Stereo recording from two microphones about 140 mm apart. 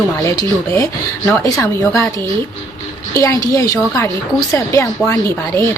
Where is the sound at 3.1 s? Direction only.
20° left (ahead or behind).